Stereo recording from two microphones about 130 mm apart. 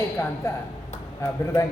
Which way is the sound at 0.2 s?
20° left (ahead or behind).